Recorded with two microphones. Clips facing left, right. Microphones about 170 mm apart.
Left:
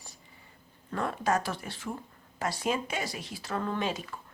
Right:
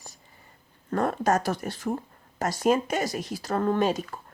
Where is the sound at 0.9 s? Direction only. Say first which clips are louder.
Right 5 dB; 45° right (ahead or behind).